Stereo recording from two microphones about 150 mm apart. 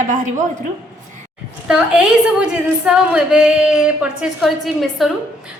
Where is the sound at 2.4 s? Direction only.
5° right (ahead or behind).